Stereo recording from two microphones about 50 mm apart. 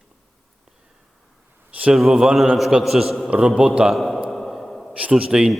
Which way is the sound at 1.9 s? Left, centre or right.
Centre.